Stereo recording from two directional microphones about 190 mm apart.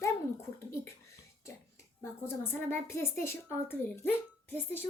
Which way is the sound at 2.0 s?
15° left (ahead or behind).